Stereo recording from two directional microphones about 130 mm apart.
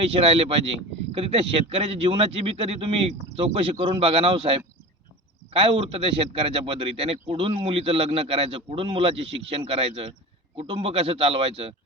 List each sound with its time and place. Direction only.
0.0 s a man's voice: 45° right (ahead or behind)